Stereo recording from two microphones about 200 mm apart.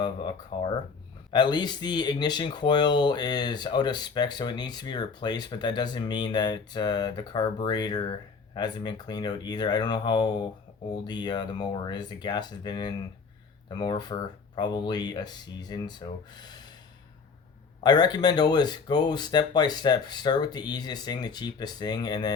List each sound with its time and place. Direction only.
0.0 s speech: 25° left (ahead or behind)
17.8 s speech: 20° left (ahead or behind)